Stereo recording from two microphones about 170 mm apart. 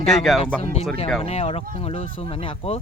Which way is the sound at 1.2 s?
35° left (ahead or behind).